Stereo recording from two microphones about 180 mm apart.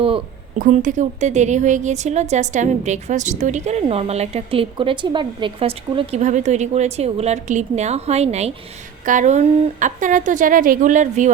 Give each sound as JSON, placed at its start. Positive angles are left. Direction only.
{"t": 0.6, "sound": "a woman's voice", "side_deg": -45}